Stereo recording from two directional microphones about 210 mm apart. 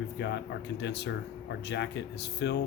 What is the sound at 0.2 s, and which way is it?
Speech, 55° left (ahead or behind).